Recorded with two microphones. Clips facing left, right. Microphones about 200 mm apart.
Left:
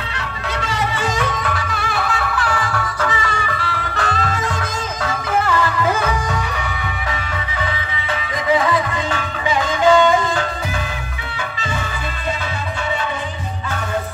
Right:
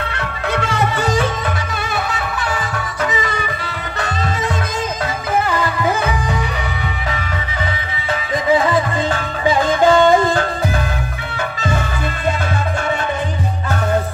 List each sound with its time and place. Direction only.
0.1 s music: 55° right (ahead or behind)
1.1 s music: 25° right (ahead or behind)
8.6 s music: 35° right (ahead or behind)